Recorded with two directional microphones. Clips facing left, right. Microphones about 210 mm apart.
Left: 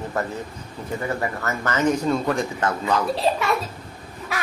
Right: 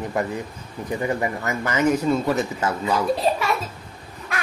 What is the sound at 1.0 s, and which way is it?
Speech, 15° right (ahead or behind).